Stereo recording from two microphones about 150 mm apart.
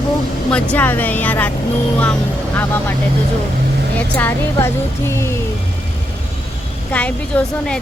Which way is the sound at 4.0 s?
10° left (ahead or behind).